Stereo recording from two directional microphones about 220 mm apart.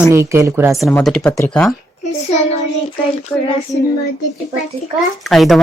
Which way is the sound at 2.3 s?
30° left (ahead or behind).